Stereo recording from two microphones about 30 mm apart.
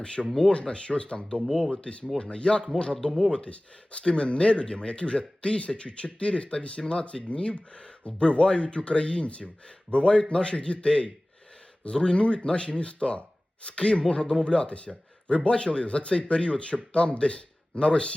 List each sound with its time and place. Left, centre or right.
0.0 s speech: left
0.3 s speech: centre
0.6 s speech: left
3.1 s speech: centre
3.3 s speech: left